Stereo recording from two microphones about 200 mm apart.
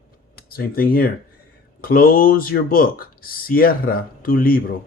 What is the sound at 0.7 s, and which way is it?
Speech, 45° left (ahead or behind).